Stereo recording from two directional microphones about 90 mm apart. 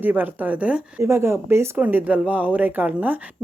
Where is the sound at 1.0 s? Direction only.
30° right (ahead or behind).